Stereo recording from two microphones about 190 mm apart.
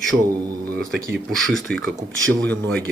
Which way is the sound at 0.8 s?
5° left (ahead or behind).